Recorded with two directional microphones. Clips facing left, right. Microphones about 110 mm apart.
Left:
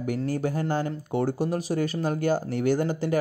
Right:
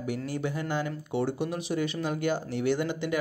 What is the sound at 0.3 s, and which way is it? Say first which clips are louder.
Speech: left 5 dB; 40° left (ahead or behind).